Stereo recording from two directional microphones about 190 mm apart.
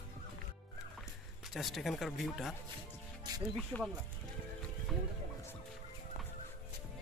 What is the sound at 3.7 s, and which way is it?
Speech, 10° left (ahead or behind).